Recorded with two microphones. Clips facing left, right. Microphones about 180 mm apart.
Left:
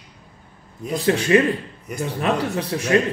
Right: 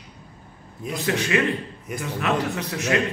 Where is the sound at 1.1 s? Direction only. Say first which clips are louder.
Left 6 dB; 30° left (ahead or behind).